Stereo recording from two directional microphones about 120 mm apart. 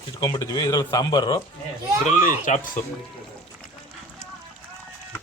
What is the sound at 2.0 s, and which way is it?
Speech, 90° left.